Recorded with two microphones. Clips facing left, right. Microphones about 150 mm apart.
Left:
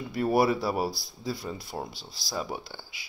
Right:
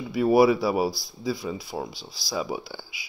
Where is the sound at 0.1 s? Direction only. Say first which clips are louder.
Right 6 dB; 5° right (ahead or behind).